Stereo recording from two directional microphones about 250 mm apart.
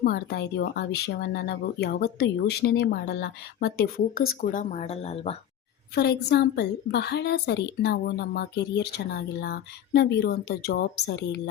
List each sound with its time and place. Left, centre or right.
0.0 s a woman's voice: left
5.9 s a woman's voice: left